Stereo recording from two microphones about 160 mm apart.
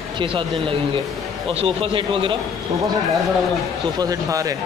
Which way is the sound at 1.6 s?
35° right (ahead or behind).